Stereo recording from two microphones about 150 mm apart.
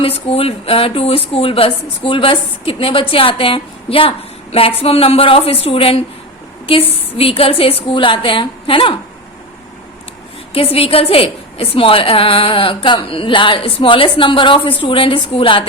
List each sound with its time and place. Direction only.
0.0 s a woman's voice: 40° left (ahead or behind)
10.5 s a woman's voice: 40° left (ahead or behind)